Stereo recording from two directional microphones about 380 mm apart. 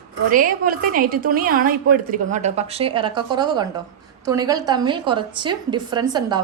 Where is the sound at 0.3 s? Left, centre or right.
Right.